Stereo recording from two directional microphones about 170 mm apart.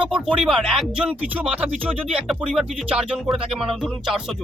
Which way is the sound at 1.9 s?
35° right (ahead or behind).